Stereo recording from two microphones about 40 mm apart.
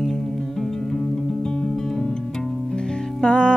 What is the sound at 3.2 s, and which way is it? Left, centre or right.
Music, left.